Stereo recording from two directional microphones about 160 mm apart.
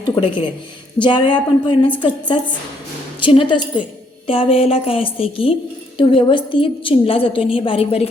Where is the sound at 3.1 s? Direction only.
30° left (ahead or behind).